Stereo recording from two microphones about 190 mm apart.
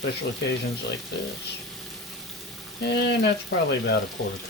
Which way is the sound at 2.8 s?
60° left (ahead or behind).